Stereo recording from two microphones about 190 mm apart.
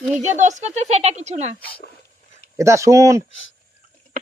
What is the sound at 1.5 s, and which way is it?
Speech, 10° left (ahead or behind).